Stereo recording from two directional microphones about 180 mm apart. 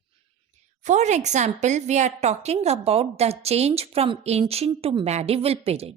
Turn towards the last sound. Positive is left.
turn(degrees=-35)  # may be behind; listen again after turning